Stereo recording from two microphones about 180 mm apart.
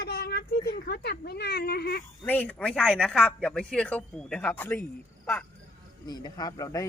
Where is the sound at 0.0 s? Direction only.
60° left (ahead or behind).